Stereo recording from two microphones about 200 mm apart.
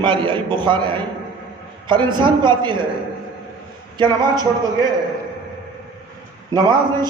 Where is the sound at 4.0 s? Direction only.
20° right (ahead or behind).